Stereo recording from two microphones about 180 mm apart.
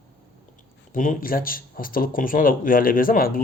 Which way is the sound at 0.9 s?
45° left (ahead or behind).